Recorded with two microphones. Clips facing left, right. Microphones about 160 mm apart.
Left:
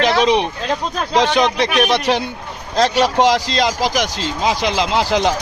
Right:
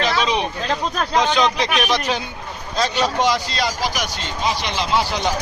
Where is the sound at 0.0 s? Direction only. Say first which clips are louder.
Left 6 dB; 65° left (ahead or behind).